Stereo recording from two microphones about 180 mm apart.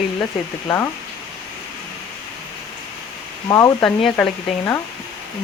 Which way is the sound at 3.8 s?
5° left (ahead or behind).